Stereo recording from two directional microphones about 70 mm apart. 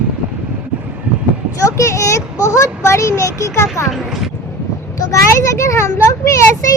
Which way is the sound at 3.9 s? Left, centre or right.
Centre.